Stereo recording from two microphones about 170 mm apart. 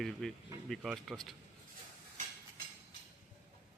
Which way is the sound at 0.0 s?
Centre (ahead or behind).